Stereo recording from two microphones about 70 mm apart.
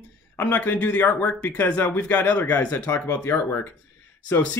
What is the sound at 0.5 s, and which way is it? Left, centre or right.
Speech, left.